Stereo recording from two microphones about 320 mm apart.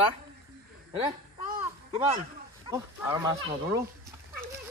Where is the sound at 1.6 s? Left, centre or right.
Centre.